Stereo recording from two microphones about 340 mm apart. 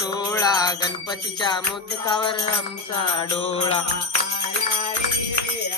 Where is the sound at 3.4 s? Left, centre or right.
Centre.